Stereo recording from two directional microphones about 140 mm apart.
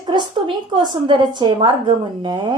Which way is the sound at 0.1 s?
35° right (ahead or behind).